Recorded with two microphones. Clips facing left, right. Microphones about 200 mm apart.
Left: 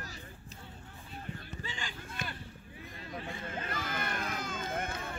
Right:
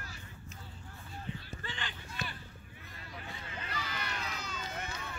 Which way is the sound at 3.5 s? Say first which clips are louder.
Left 3 dB; 50° left (ahead or behind).